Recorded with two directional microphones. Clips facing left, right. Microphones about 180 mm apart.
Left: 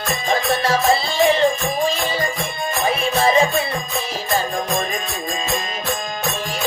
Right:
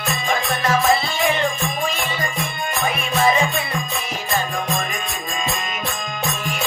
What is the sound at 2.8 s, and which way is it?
Music, 30° left (ahead or behind).